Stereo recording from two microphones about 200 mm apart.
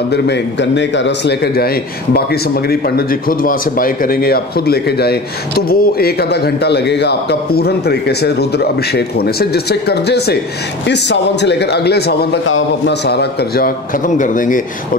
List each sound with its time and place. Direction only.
0.1 s a man's voice: 60° left (ahead or behind)
2.7 s a man's voice: 45° left (ahead or behind)
12.4 s a man's voice: 70° left (ahead or behind); by 14.6 s 40° left (ahead or behind)